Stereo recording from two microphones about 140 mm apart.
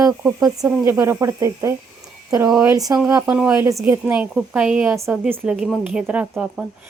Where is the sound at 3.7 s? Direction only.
20° right (ahead or behind); by 4.9 s 5° right (ahead or behind).